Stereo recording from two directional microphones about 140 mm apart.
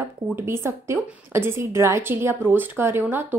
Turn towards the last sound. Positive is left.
turn(degrees=-15)  # may be behind; listen again after turning